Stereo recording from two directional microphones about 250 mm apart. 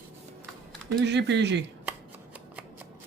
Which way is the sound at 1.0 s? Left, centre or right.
Right.